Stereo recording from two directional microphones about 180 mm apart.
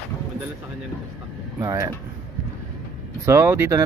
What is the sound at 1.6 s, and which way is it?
Speech, 20° right (ahead or behind).